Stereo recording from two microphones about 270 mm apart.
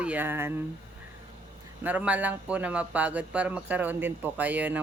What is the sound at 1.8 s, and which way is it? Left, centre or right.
Speech, centre.